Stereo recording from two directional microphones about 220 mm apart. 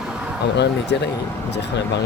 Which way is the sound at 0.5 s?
50° left (ahead or behind).